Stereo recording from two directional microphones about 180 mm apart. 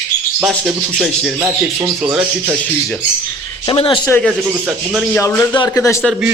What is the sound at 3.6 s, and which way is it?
Speech, 30° left (ahead or behind).